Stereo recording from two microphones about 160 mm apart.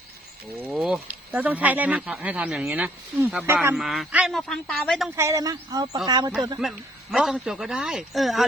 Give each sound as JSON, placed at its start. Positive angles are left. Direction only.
{"t": 0.7, "sound": "speech", "side_deg": 0}
{"t": 3.8, "sound": "speech", "side_deg": 0}
{"t": 5.1, "sound": "speech", "side_deg": -20}
{"t": 6.6, "sound": "speech", "side_deg": 0}